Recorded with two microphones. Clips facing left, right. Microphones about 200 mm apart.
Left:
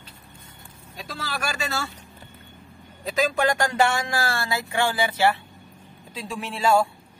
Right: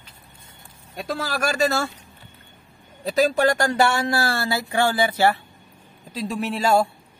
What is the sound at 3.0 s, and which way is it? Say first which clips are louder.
Speech: right 4 dB; 35° right (ahead or behind).